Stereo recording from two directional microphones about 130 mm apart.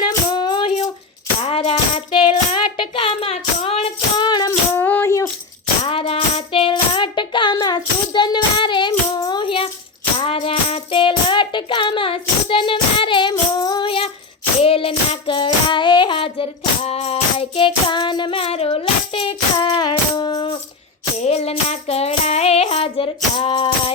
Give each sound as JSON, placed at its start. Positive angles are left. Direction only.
{"t": 0.0, "sound": "music", "side_deg": 35}
{"t": 2.1, "sound": "a sound", "side_deg": 40}
{"t": 4.3, "sound": "music", "side_deg": 35}
{"t": 4.7, "sound": "a sound", "side_deg": 15}
{"t": 5.9, "sound": "music", "side_deg": 45}
{"t": 13.5, "sound": "child singing", "side_deg": 35}
{"t": 14.6, "sound": "music", "side_deg": 45}
{"t": 21.2, "sound": "music", "side_deg": 55}